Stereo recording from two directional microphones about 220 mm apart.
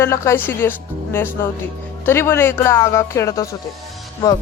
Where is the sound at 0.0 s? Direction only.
10° left (ahead or behind).